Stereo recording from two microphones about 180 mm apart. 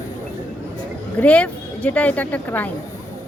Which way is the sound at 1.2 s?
10° left (ahead or behind).